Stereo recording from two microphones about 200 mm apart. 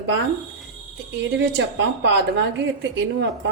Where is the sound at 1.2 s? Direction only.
60° right (ahead or behind).